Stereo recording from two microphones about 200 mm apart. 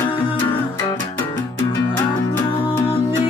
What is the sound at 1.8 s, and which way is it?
Music, 20° left (ahead or behind).